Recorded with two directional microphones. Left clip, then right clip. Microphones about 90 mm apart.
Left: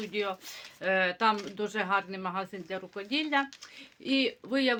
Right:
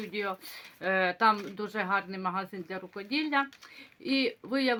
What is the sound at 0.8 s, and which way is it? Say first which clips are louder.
Speech: right 1 dB; 35° right (ahead or behind).